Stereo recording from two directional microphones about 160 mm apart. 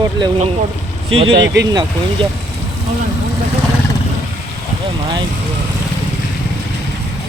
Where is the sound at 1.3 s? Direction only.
90° right.